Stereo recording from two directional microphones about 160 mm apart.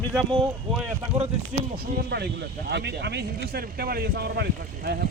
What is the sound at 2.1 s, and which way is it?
Speech, 90° right.